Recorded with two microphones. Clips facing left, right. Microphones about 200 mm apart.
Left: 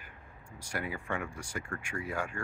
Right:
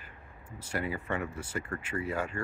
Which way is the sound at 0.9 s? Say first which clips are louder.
Right 3 dB; 5° right (ahead or behind).